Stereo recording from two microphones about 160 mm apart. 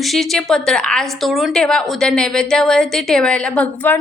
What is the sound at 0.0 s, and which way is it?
A woman's voice, centre (ahead or behind).